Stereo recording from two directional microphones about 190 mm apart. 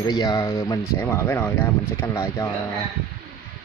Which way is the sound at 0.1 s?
20° left (ahead or behind).